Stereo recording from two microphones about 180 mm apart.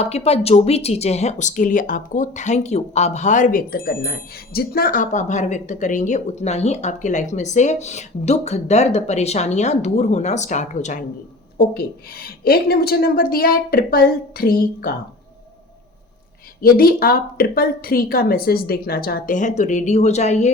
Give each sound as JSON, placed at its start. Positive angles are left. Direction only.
{"t": 0.0, "sound": "speech", "side_deg": 35}
{"t": 11.5, "sound": "a woman's voice", "side_deg": 60}
{"t": 16.6, "sound": "a woman's voice", "side_deg": 55}